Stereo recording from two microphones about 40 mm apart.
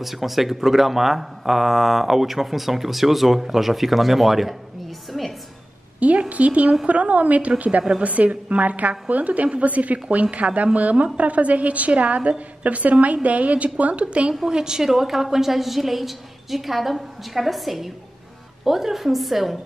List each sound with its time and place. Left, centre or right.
0.0 s speech: centre
5.9 s a sound: right
6.9 s a woman's voice: right
14.5 s speech: centre